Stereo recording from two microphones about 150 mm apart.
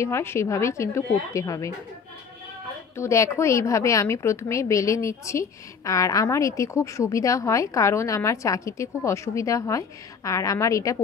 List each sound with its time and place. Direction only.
0.0 s a woman's voice: 15° left (ahead or behind)
3.0 s a woman's voice: 20° left (ahead or behind)